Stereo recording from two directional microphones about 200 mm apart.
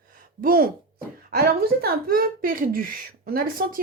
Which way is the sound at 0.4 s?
45° right (ahead or behind).